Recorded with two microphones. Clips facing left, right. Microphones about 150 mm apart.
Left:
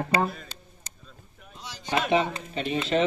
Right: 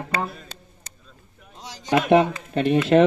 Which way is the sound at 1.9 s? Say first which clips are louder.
Right 7 dB; 55° right (ahead or behind).